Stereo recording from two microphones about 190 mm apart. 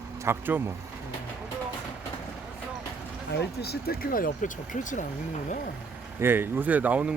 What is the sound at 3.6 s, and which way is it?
Speech, 55° left (ahead or behind).